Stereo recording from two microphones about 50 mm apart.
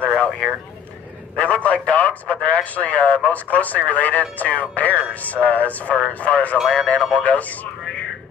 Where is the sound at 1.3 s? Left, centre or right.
Left.